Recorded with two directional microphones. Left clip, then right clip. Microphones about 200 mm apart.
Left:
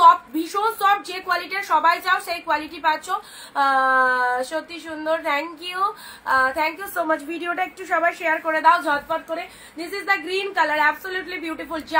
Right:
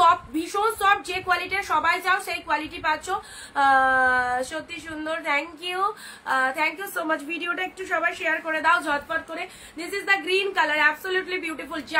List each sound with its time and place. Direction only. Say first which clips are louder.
0.0 s a sound: left 5 dB; 20° right (ahead or behind)
1.2 s a woman's voice: left 1 dB; 45° right (ahead or behind)
1.5 s a woman's voice: left 8 dB; 15° right (ahead or behind)